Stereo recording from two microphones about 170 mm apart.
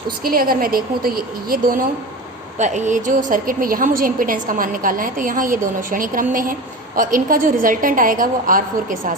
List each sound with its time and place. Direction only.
0.3 s a woman's voice: 60° right (ahead or behind)
2.6 s a woman's voice: 45° right (ahead or behind)